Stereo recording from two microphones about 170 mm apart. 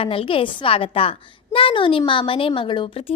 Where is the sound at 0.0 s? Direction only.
35° left (ahead or behind).